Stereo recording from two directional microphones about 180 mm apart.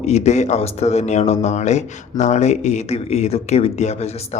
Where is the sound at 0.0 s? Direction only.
40° left (ahead or behind).